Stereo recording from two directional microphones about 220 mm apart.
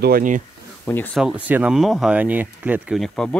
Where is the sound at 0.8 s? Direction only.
10° left (ahead or behind).